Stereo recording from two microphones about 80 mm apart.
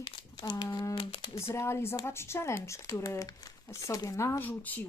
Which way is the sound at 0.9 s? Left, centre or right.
Left.